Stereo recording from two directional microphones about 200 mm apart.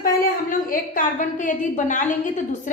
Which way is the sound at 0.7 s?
40° left (ahead or behind).